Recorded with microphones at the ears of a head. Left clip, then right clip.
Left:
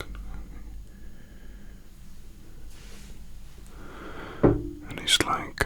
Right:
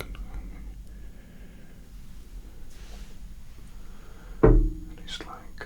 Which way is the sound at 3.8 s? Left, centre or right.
Left.